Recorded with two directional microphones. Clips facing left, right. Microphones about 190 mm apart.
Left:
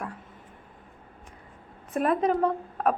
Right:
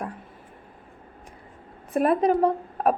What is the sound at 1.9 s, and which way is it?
A woman's voice, 35° right (ahead or behind).